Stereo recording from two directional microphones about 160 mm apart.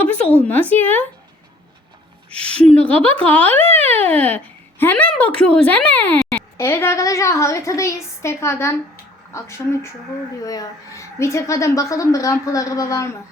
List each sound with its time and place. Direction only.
0.0 s a sound: 10° left (ahead or behind)
0.4 s a woman's voice: 10° left (ahead or behind)
2.6 s a woman's voice: 10° left (ahead or behind)